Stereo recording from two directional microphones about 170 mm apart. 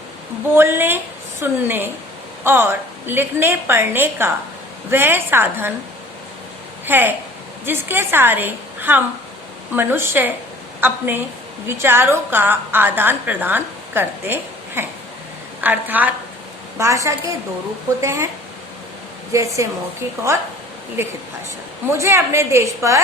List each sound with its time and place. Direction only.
0.5 s a woman's voice: 15° right (ahead or behind)
6.8 s a woman's voice: 10° right (ahead or behind)
19.3 s a woman's voice: 20° right (ahead or behind)
21.8 s a woman's voice: 15° right (ahead or behind)